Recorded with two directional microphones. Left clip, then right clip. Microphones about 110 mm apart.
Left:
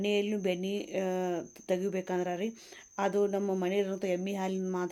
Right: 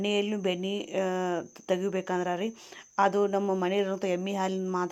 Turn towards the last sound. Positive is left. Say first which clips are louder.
# right 4 dB
turn(degrees=0)  # may be behind; listen again after turning